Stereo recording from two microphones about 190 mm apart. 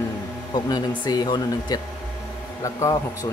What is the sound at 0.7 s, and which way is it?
Speech, 20° left (ahead or behind).